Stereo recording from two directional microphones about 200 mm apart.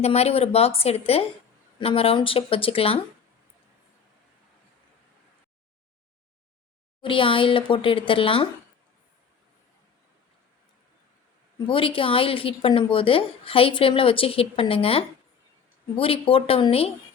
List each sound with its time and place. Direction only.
0.0 s a woman's voice: 30° left (ahead or behind)
7.0 s a woman's voice: 25° left (ahead or behind)
11.7 s a woman's voice: 25° left (ahead or behind)